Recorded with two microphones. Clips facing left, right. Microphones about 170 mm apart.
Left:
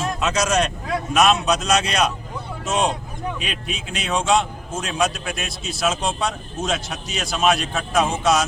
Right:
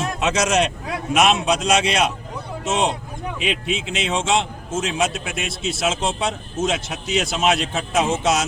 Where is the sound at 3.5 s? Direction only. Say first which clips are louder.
Right 6 dB; 90° right.